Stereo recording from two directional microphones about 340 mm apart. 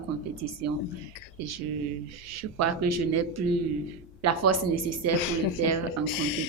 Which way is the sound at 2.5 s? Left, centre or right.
Right.